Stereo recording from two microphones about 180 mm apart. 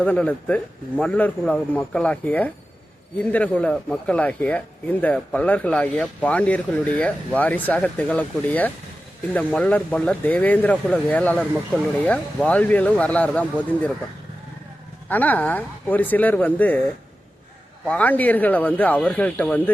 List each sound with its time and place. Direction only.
0.0 s a man's voice: 10° left (ahead or behind)
15.1 s a man's voice: 10° left (ahead or behind)
17.8 s a man's voice: 10° left (ahead or behind)